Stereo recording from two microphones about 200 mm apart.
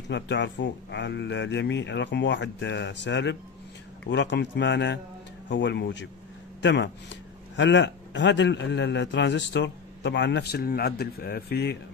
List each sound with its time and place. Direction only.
0.1 s a man's voice: 60° left (ahead or behind)